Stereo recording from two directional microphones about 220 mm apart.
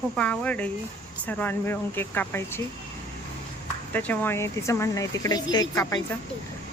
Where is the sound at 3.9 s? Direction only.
5° left (ahead or behind).